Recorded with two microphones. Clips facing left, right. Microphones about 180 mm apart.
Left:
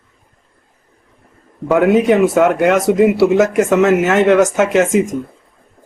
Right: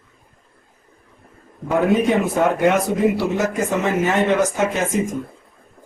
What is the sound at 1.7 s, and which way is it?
Speech, 85° left.